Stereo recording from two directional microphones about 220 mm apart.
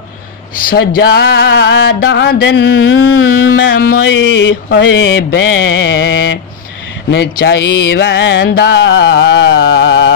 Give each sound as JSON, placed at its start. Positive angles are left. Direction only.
{"t": 0.7, "sound": "music", "side_deg": 45}
{"t": 3.7, "sound": "speech", "side_deg": 40}
{"t": 4.6, "sound": "music", "side_deg": 55}